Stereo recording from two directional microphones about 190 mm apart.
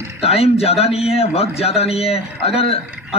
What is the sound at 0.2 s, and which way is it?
A man's voice, 30° left (ahead or behind).